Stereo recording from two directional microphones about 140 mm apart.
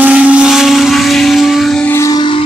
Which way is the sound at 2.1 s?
35° left (ahead or behind).